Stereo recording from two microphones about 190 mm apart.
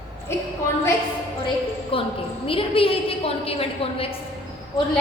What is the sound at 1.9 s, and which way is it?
A woman's voice, 30° left (ahead or behind).